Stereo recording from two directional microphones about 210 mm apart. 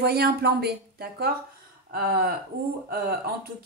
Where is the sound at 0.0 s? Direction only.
50° right (ahead or behind).